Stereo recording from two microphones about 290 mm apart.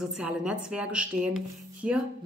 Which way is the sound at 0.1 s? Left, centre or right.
Centre.